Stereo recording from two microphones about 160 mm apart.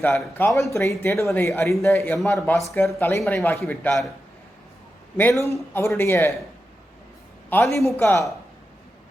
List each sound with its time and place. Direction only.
0.3 s speech: 15° left (ahead or behind)
5.1 s speech: 15° left (ahead or behind)
7.5 s speech: 15° left (ahead or behind)